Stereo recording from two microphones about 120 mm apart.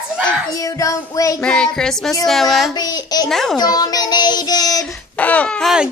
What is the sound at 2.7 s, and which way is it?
Speech, 35° left (ahead or behind).